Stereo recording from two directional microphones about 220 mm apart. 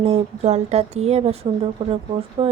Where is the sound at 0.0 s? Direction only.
30° right (ahead or behind).